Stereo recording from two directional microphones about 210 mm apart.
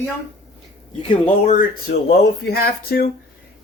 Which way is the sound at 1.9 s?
60° left (ahead or behind).